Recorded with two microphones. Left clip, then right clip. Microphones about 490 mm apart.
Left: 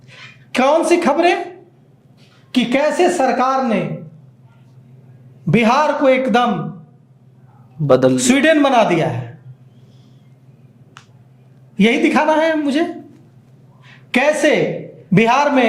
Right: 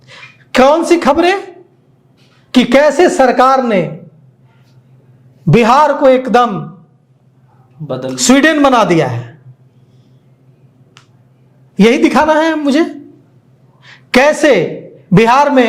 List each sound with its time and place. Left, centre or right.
0.5 s a woman's voice: right
2.5 s a woman's voice: right
5.5 s a woman's voice: right
8.1 s a man's voice: right
11.8 s a man's voice: right
14.1 s a woman's voice: right